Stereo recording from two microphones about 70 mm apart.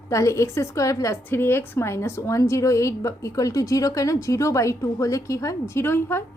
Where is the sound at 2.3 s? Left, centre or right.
Left.